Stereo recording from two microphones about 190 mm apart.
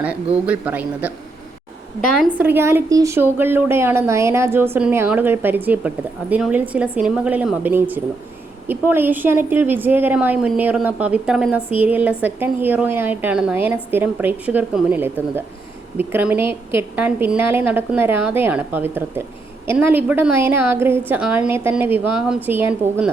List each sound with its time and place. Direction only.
0.4 s a woman's voice: 5° right (ahead or behind)
2.4 s a woman's voice: 10° right (ahead or behind)